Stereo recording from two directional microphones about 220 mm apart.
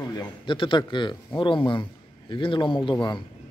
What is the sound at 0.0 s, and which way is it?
A man's voice, 15° left (ahead or behind).